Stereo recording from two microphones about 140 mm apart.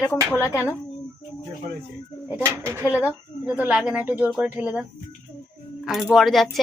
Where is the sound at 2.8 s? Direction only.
20° left (ahead or behind).